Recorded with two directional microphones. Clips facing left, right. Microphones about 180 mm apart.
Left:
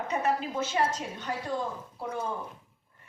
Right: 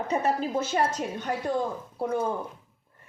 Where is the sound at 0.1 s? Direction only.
35° right (ahead or behind).